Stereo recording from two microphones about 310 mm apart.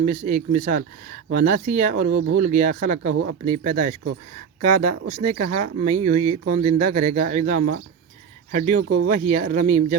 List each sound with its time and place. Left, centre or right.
0.0 s speech: right
2.0 s speech: right
2.3 s speech: right
8.8 s speech: right
9.3 s speech: right